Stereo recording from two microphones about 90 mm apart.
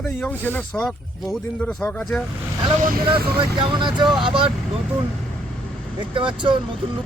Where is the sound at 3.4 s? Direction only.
65° right (ahead or behind).